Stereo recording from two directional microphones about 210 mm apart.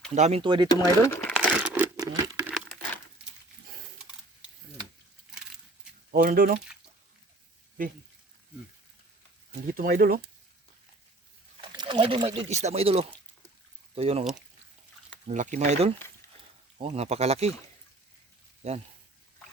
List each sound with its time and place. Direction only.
0.1 s speech: 30° right (ahead or behind)
0.7 s speech: 15° left (ahead or behind)
1.6 s a sound: 10° right (ahead or behind)
2.5 s crumpling: centre (ahead or behind)
6.1 s speech: 45° right (ahead or behind)
9.7 s speech: 40° right (ahead or behind)
11.8 s speech: 20° right (ahead or behind)
15.3 s speech: 35° right (ahead or behind)
18.6 s speech: 30° right (ahead or behind)